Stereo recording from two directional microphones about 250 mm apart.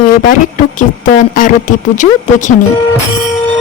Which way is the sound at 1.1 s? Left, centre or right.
Left.